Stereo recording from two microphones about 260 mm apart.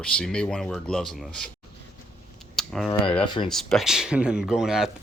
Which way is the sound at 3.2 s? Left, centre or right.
Centre.